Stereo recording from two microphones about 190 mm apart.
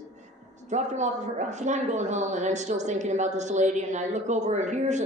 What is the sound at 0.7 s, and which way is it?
Speech, 40° right (ahead or behind).